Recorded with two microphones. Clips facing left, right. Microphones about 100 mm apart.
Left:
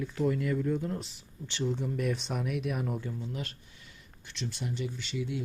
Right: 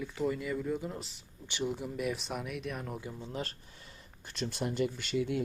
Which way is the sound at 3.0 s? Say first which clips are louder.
Left 4 dB; 15° right (ahead or behind).